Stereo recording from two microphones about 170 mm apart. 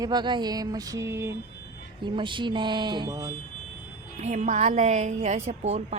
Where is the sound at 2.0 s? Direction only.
30° right (ahead or behind).